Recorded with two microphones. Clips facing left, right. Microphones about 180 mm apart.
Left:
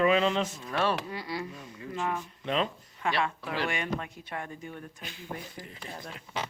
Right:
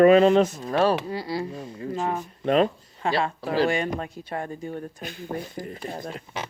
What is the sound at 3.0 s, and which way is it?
Speech, 35° right (ahead or behind).